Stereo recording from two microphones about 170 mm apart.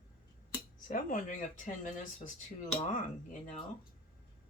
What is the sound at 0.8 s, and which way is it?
Speech, 55° left (ahead or behind).